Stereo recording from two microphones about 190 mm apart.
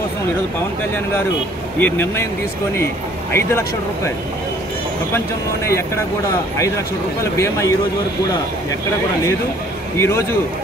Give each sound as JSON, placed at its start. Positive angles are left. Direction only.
{"t": 1.8, "sound": "speech", "side_deg": 10}
{"t": 3.3, "sound": "speech", "side_deg": 15}
{"t": 7.3, "sound": "speech", "side_deg": 15}
{"t": 9.9, "sound": "speech", "side_deg": 15}